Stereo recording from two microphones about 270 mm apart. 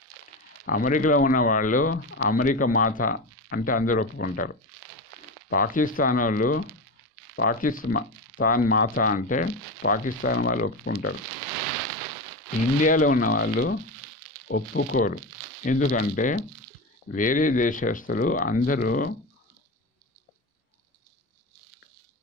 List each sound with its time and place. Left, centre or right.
0.7 s speech: left
5.5 s speech: left
12.8 s speech: left